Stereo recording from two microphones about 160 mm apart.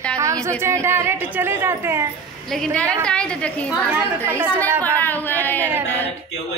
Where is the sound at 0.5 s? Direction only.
15° right (ahead or behind).